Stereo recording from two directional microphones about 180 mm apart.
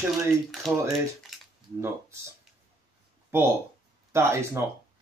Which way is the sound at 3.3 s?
15° right (ahead or behind).